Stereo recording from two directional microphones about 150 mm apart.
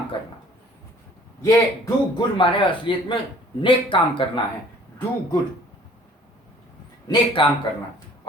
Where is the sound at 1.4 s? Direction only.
20° left (ahead or behind).